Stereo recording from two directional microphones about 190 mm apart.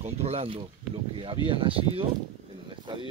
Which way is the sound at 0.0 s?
35° right (ahead or behind).